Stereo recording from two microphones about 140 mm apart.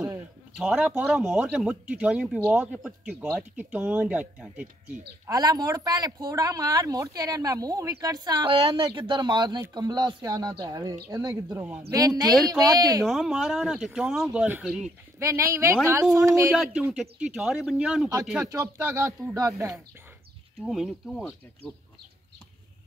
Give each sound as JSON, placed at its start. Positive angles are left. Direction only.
{"t": 0.6, "sound": "speech", "side_deg": -5}
{"t": 5.2, "sound": "speech", "side_deg": -25}
{"t": 13.0, "sound": "speech", "side_deg": 0}
{"t": 15.1, "sound": "speech", "side_deg": -20}
{"t": 16.9, "sound": "speech", "side_deg": -5}
{"t": 18.4, "sound": "speech", "side_deg": -20}
{"t": 20.6, "sound": "speech", "side_deg": 0}